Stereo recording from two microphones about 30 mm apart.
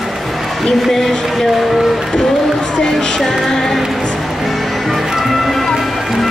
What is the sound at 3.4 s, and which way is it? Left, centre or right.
Music, centre.